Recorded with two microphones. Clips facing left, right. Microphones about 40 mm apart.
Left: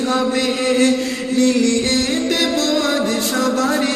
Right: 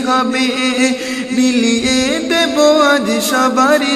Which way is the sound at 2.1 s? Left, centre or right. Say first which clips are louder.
Right 4 dB; right.